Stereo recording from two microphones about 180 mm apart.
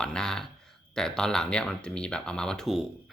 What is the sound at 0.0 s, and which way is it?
Speech, 5° left (ahead or behind).